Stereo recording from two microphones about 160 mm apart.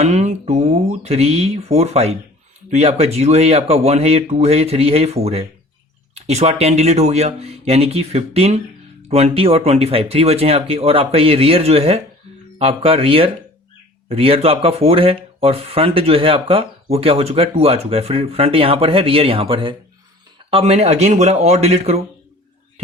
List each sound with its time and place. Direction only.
0.0 s speech: 45° right (ahead or behind)